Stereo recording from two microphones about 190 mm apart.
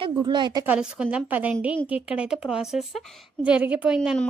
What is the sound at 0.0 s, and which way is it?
Speech, 25° right (ahead or behind).